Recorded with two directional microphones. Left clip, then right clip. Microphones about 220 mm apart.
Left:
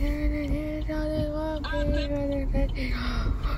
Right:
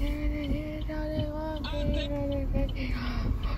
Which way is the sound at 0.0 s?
10° left (ahead or behind).